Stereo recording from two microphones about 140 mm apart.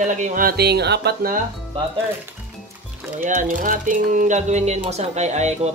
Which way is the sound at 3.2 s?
70° right (ahead or behind).